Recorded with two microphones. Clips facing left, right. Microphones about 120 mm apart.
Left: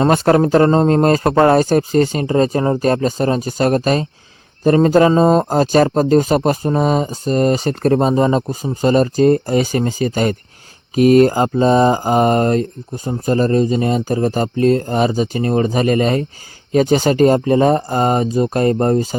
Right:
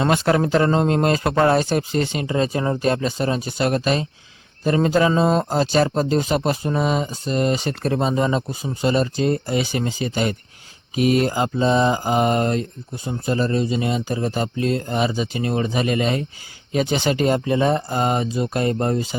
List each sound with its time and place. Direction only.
0.0 s speech: 40° left (ahead or behind)